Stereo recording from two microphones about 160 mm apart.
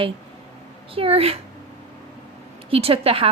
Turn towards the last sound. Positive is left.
turn(degrees=-35)  # may be behind; listen again after turning